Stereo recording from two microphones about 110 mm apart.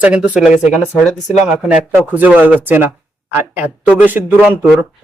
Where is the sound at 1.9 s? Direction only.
15° right (ahead or behind).